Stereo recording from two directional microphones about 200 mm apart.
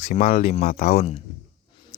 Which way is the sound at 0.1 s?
35° left (ahead or behind).